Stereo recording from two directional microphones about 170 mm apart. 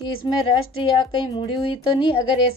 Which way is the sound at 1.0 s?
25° left (ahead or behind).